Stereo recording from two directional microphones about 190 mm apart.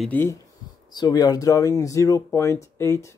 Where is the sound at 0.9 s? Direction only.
20° left (ahead or behind).